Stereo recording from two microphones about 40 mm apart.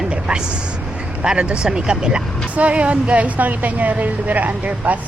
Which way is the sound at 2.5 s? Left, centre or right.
Right.